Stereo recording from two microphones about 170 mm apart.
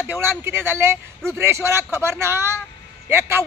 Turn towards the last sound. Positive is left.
turn(degrees=-15)  # may be behind; listen again after turning